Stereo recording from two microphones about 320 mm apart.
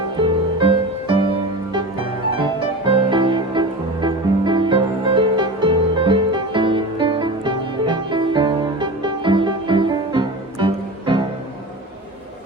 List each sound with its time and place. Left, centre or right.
0.2 s music: centre
2.8 s music: centre